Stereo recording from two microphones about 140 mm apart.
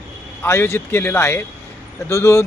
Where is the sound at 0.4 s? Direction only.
15° left (ahead or behind).